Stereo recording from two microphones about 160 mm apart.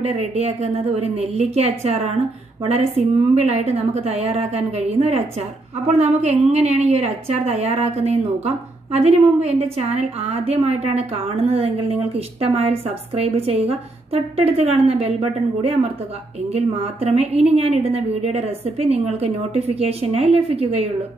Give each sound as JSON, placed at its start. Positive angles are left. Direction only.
{"t": 0.0, "sound": "a woman's voice", "side_deg": -40}